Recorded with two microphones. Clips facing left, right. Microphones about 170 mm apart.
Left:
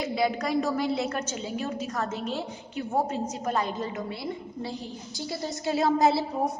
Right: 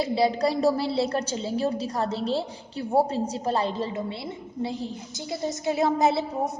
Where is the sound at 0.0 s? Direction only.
30° right (ahead or behind).